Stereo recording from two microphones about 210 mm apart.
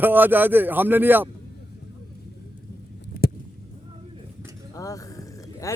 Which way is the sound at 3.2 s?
45° left (ahead or behind).